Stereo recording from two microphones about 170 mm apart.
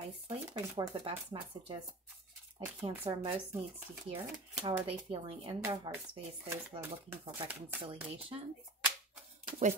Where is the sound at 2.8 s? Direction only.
35° right (ahead or behind).